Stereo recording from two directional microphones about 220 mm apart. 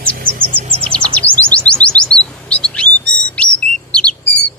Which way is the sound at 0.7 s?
25° right (ahead or behind).